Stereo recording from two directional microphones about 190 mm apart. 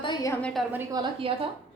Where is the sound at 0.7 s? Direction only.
20° right (ahead or behind).